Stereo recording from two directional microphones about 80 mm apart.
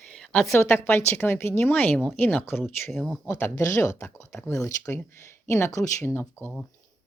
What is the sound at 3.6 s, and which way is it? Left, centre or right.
Speech, left.